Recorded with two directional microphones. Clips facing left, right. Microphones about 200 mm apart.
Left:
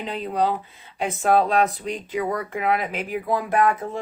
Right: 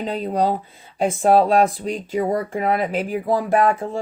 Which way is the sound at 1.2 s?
35° right (ahead or behind).